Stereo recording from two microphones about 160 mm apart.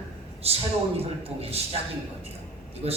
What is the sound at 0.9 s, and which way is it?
Speech, 40° right (ahead or behind).